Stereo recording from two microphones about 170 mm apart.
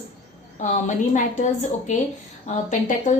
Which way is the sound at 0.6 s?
45° left (ahead or behind).